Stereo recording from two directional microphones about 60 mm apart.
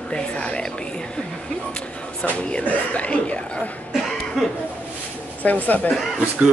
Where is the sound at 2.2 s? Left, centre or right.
Left.